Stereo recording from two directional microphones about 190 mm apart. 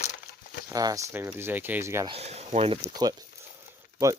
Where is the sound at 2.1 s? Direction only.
35° right (ahead or behind).